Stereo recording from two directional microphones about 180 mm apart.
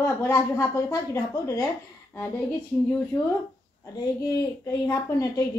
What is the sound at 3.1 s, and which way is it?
A woman's voice, 10° left (ahead or behind).